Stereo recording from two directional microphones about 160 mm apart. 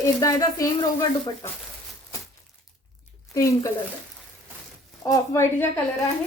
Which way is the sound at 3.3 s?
20° left (ahead or behind).